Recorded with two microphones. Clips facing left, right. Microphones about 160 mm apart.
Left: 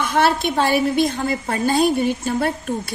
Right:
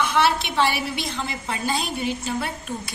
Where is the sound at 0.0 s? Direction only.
45° left (ahead or behind).